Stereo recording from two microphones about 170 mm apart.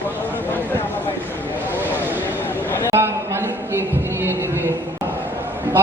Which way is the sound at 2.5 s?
10° left (ahead or behind).